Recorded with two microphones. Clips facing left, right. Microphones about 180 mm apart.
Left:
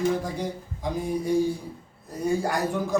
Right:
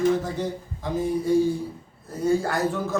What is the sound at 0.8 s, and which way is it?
Speech, 15° left (ahead or behind).